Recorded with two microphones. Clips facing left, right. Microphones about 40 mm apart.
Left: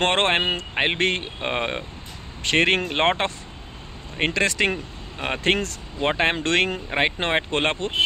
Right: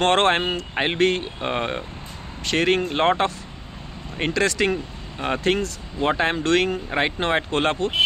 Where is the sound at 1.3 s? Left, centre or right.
Left.